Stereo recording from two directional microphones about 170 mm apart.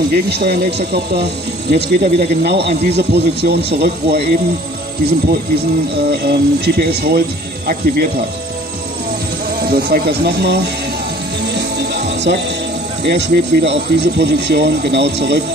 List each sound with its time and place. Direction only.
0.1 s speech: 70° right (ahead or behind)
6.0 s speech: 70° right (ahead or behind)
9.7 s speech: 65° right (ahead or behind)
11.5 s music: 85° right
13.0 s speech: 85° right